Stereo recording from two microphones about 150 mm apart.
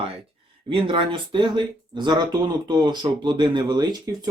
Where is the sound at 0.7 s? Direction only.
35° right (ahead or behind).